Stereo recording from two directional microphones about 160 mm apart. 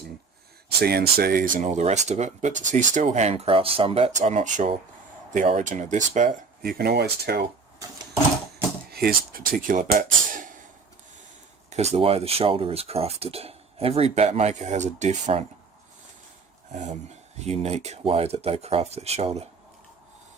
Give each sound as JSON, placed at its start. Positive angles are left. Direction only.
{"t": 0.8, "sound": "speech", "side_deg": -75}
{"t": 7.8, "sound": "sewing machine", "side_deg": -20}
{"t": 8.9, "sound": "speech", "side_deg": -70}
{"t": 11.7, "sound": "speech", "side_deg": -45}
{"t": 16.7, "sound": "speech", "side_deg": -50}